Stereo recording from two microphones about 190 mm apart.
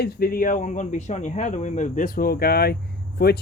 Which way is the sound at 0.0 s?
50° left (ahead or behind).